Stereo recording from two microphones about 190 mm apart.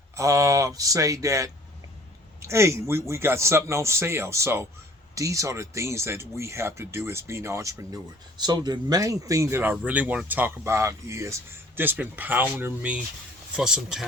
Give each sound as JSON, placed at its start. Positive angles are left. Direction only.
{"t": 0.2, "sound": "speech", "side_deg": -15}